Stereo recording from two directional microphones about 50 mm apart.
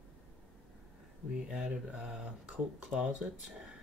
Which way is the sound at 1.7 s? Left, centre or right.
Right.